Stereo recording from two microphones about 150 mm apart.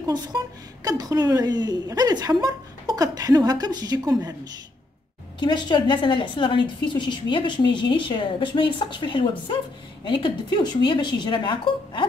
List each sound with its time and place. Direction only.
0.0 s a woman's voice: 25° right (ahead or behind)
5.4 s a woman's voice: 30° left (ahead or behind)